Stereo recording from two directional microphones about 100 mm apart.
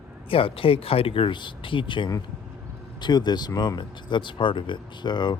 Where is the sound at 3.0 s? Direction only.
45° left (ahead or behind).